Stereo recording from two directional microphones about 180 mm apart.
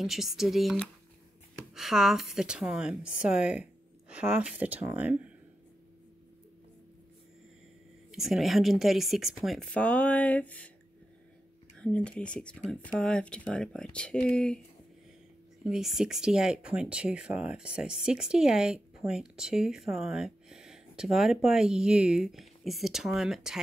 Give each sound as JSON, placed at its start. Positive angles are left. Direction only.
{"t": 0.0, "sound": "speech", "side_deg": 0}
{"t": 8.1, "sound": "speech", "side_deg": 0}
{"t": 11.8, "sound": "speech", "side_deg": 5}
{"t": 15.6, "sound": "speech", "side_deg": 0}